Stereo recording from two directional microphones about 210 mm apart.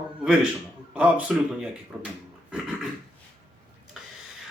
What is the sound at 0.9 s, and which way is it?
Speech, 5° right (ahead or behind).